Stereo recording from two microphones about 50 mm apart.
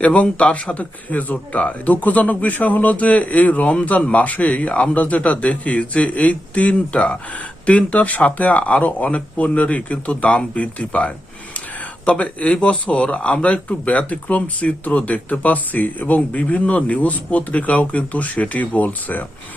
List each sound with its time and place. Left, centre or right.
0.0 s a man's voice: left